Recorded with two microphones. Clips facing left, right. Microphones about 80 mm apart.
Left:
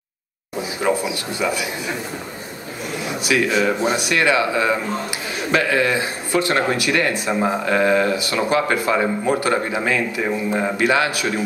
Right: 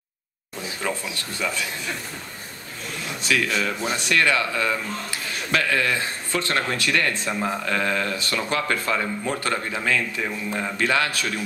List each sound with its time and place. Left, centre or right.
0.6 s a man's voice: centre
3.1 s a man's voice: centre